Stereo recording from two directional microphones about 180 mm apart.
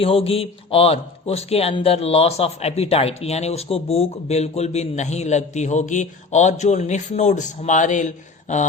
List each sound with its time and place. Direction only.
0.0 s a man's voice: 30° left (ahead or behind)